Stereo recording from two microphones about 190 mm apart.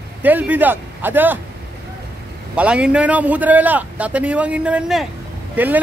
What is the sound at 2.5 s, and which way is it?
Speech, 5° right (ahead or behind).